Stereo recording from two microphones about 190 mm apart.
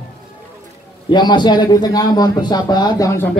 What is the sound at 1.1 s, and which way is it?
A man's voice, 25° left (ahead or behind).